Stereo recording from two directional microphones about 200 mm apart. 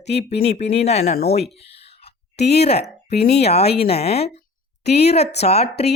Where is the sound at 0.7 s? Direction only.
30° left (ahead or behind).